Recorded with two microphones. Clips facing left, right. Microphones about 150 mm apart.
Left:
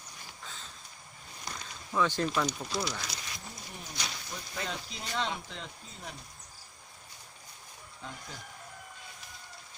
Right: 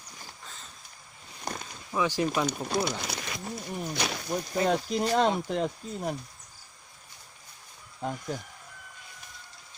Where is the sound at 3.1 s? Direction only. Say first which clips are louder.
Right 8 dB; 65° right (ahead or behind).